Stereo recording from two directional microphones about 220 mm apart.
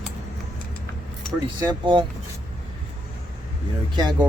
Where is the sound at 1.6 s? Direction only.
20° right (ahead or behind).